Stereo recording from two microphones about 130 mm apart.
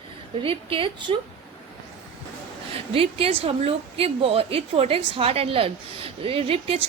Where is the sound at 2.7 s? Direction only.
50° right (ahead or behind).